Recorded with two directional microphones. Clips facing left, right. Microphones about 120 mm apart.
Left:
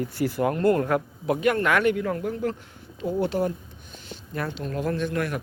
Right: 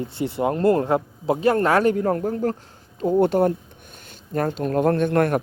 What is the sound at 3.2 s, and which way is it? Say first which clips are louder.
Speech: right 7 dB; 55° right (ahead or behind).